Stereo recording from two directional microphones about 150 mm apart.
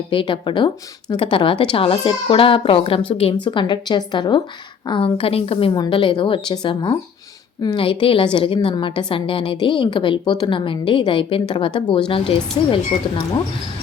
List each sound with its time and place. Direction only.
0.1 s a woman's voice: 35° left (ahead or behind)